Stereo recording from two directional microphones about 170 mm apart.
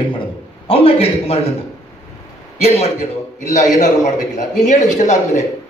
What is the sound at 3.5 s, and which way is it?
A man's voice, 45° left (ahead or behind).